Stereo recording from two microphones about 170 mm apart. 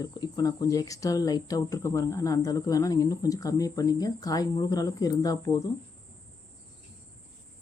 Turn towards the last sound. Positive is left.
turn(degrees=20)  # may be behind; listen again after turning